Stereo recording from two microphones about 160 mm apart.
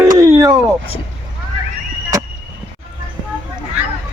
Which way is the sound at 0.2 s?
20° right (ahead or behind).